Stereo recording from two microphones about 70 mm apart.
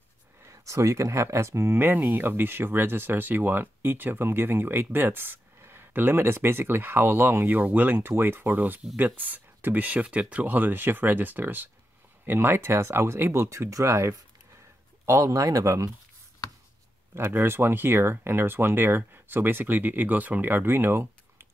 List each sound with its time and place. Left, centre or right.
0.5 s speech: right
17.1 s speech: right